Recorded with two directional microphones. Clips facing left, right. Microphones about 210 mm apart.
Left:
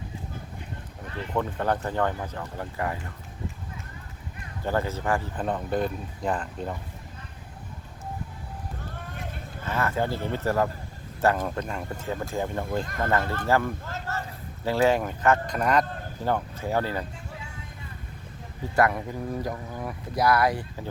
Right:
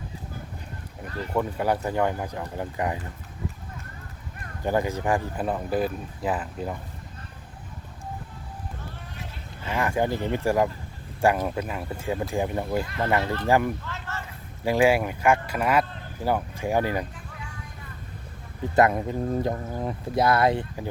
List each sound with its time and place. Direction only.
1.4 s speech: 10° right (ahead or behind)
4.6 s speech: 15° right (ahead or behind)
9.1 s a sound: 50° left (ahead or behind)
9.6 s speech: 15° right (ahead or behind)
13.8 s a sound: 40° left (ahead or behind)
14.6 s speech: 10° right (ahead or behind)
18.8 s speech: 20° right (ahead or behind)